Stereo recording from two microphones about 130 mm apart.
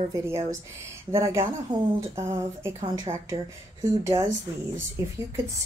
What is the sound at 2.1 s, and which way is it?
Speech, 20° right (ahead or behind).